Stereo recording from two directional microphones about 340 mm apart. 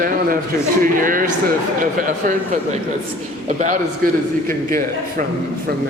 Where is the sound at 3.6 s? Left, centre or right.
Right.